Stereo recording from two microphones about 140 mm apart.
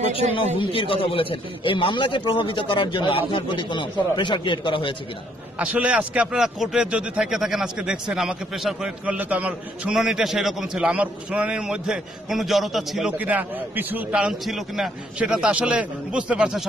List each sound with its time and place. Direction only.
0.6 s a man's voice: 40° left (ahead or behind)
5.6 s speech: 10° right (ahead or behind)
13.2 s a man's voice: 10° right (ahead or behind)